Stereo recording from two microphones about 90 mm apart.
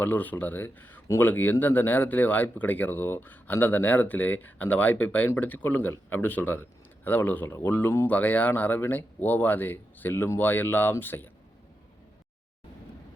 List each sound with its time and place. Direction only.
0.0 s speech: 20° left (ahead or behind)